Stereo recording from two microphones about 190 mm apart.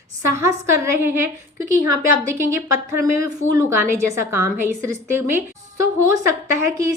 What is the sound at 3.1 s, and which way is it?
A woman's voice, 15° right (ahead or behind).